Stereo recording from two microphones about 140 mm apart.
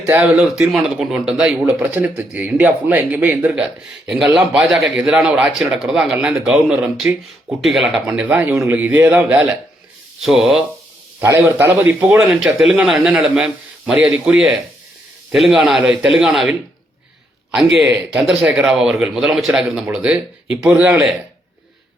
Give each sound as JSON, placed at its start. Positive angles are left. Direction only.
{"t": 0.0, "sound": "speech", "side_deg": -15}
{"t": 0.3, "sound": "speech", "side_deg": 0}
{"t": 10.2, "sound": "speech", "side_deg": 0}
{"t": 11.2, "sound": "speech", "side_deg": -15}